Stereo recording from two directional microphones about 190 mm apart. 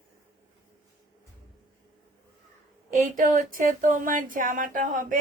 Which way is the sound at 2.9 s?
45° right (ahead or behind).